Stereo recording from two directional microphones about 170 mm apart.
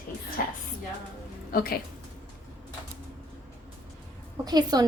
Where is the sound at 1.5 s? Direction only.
60° left (ahead or behind).